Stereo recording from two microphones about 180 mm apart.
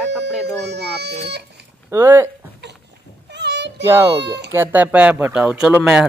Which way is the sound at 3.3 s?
70° right (ahead or behind).